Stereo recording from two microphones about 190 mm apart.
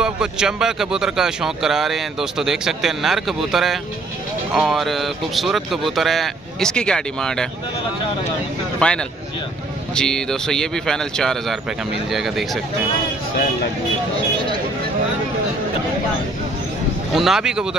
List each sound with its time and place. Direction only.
0.0 s speech: 5° right (ahead or behind)
8.7 s a man's voice: 5° left (ahead or behind)
17.1 s speech: centre (ahead or behind)